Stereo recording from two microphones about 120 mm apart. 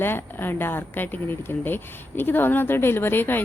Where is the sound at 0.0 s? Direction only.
20° left (ahead or behind).